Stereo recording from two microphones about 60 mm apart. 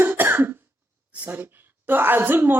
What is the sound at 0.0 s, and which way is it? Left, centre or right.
Cough, right.